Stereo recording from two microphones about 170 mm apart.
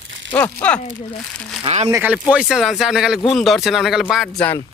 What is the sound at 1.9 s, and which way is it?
Speech, 15° right (ahead or behind).